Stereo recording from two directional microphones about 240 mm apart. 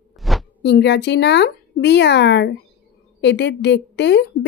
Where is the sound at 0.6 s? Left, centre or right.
Left.